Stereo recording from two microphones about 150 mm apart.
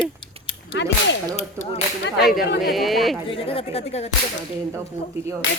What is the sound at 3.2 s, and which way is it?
Speech, 40° left (ahead or behind).